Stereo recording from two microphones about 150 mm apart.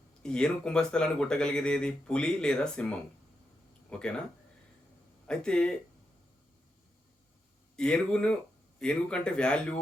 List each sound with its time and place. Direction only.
0.2 s speech: 5° left (ahead or behind)
3.8 s speech: 5° left (ahead or behind)
5.3 s speech: 5° left (ahead or behind)
7.8 s speech: 5° left (ahead or behind)